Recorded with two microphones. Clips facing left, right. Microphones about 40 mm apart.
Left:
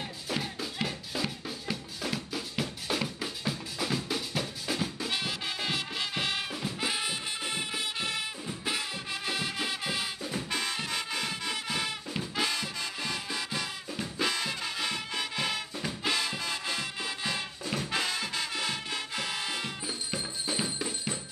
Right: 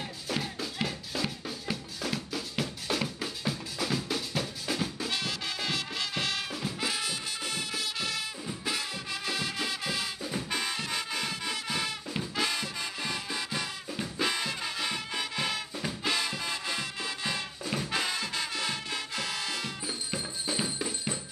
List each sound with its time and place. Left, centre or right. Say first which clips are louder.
0.3 s music: even; centre
5.1 s music: even; centre
10.3 s music: even; centre
19.9 s music: even; centre